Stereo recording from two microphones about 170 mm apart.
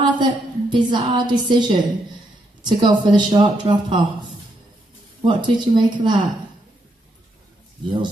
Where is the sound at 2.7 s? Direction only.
25° right (ahead or behind).